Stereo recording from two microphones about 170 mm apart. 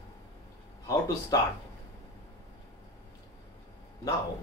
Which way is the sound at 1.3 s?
20° left (ahead or behind).